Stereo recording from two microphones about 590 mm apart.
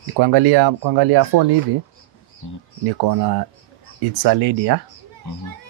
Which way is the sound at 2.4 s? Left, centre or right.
Left.